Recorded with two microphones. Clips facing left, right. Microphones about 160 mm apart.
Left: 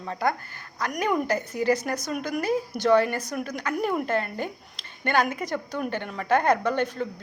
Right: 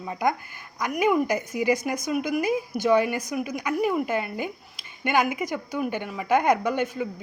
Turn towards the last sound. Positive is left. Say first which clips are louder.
# even
turn(degrees=-10)  # may be behind; listen again after turning